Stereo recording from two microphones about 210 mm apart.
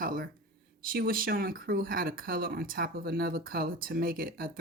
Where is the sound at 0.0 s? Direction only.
40° right (ahead or behind).